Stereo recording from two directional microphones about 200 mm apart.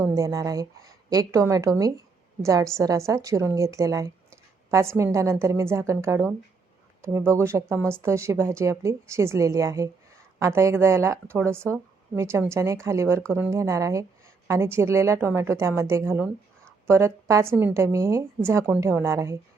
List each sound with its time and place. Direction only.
0.0 s speech: 15° right (ahead or behind)